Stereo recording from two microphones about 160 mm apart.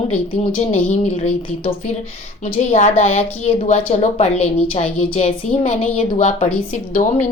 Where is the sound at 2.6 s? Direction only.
50° left (ahead or behind).